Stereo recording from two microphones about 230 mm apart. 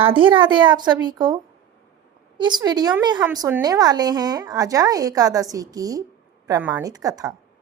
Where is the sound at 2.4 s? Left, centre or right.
Centre.